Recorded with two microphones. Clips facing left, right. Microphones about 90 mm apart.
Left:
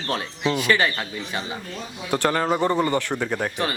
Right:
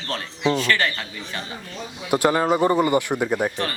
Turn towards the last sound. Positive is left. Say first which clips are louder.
# right 3 dB
turn(degrees=-10)  # may be behind; listen again after turning